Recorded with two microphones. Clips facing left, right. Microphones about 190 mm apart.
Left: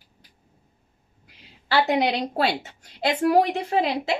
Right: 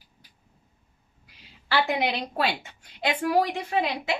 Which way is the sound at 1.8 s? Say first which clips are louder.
Left 5 dB; 35° left (ahead or behind).